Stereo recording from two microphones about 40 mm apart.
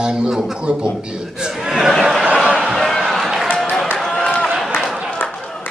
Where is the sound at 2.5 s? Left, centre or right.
Centre.